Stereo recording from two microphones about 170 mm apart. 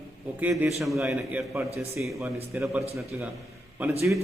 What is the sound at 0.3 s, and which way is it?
A man's voice, 10° right (ahead or behind).